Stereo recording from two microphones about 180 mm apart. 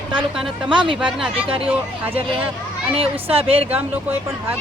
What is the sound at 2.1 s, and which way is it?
A woman's voice, 30° right (ahead or behind).